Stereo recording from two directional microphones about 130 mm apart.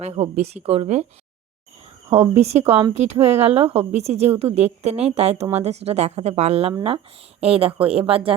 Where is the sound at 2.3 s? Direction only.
55° right (ahead or behind).